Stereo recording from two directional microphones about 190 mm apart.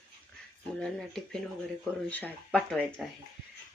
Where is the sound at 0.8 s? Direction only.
5° left (ahead or behind).